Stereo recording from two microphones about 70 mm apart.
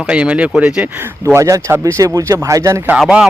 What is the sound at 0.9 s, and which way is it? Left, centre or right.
Speech, right.